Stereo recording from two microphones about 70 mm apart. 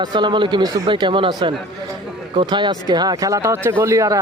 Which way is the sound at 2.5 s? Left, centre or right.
Right.